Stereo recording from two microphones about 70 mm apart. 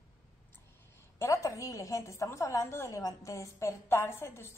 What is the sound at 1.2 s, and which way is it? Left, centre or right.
A woman's voice, left.